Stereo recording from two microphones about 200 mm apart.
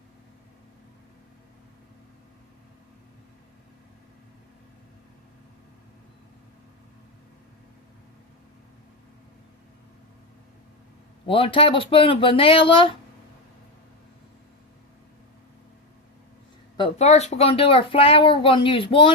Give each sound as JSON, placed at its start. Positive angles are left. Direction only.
{"t": 11.3, "sound": "speech", "side_deg": 25}
{"t": 16.7, "sound": "speech", "side_deg": 30}